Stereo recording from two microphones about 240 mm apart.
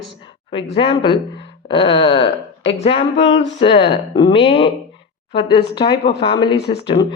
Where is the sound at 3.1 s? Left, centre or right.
Left.